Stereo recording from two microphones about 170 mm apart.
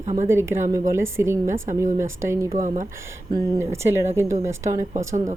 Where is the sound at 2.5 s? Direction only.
50° right (ahead or behind).